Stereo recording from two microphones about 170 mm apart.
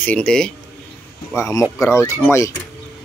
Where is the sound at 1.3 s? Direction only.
15° left (ahead or behind).